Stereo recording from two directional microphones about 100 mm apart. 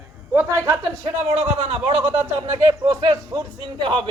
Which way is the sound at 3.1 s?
50° right (ahead or behind).